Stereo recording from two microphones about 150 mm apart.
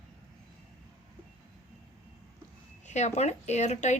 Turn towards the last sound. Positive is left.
turn(degrees=50)  # may be behind; listen again after turning